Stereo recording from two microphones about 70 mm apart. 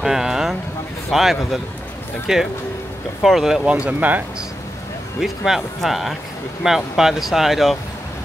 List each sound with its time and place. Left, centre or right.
0.0 s a sound: centre
1.1 s speech: centre
3.6 s speech: centre
5.2 s speech: centre